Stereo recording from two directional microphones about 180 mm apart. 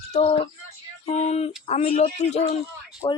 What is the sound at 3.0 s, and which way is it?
Speech, 25° left (ahead or behind).